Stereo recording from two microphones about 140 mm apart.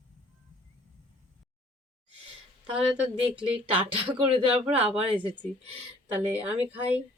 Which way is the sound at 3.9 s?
40° right (ahead or behind).